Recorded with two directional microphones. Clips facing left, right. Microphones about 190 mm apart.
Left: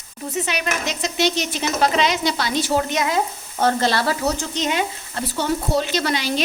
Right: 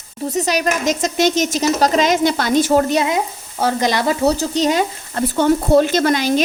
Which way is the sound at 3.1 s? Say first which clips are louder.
Right 2 dB; 15° right (ahead or behind).